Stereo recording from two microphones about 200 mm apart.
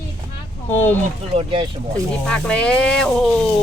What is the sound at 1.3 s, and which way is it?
Speech, 25° right (ahead or behind).